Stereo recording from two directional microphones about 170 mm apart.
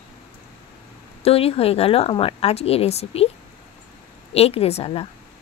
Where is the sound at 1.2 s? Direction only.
35° left (ahead or behind).